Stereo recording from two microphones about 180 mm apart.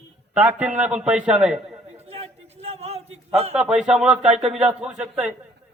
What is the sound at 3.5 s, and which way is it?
A man's voice, 5° right (ahead or behind).